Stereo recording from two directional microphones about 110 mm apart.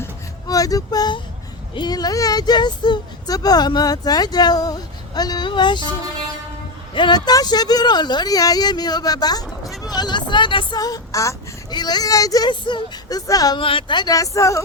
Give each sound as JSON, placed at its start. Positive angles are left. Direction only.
{"t": 0.4, "sound": "speech", "side_deg": 35}
{"t": 6.9, "sound": "speech", "side_deg": 45}
{"t": 10.8, "sound": "a child's voice", "side_deg": 35}
{"t": 12.5, "sound": "speech", "side_deg": 45}
{"t": 13.6, "sound": "speech", "side_deg": 50}